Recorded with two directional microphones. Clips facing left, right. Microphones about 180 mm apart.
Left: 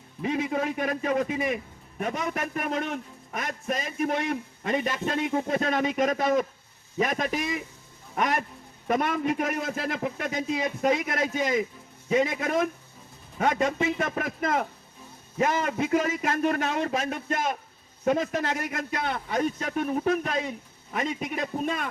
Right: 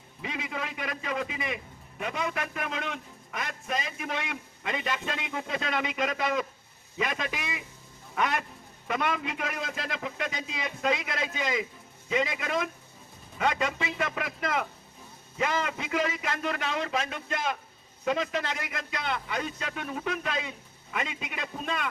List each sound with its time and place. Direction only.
0.2 s a man's voice: 45° left (ahead or behind)